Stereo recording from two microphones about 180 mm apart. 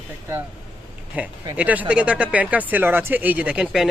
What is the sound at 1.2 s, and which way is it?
Speech, 10° right (ahead or behind).